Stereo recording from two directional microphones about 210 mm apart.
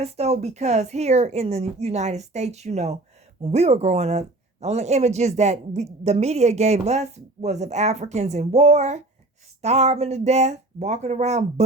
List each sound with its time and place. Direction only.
0.0 s speech: 30° right (ahead or behind)